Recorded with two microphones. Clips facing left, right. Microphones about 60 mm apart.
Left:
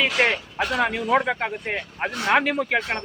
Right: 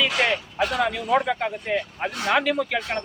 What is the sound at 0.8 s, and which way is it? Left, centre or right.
Speech, left.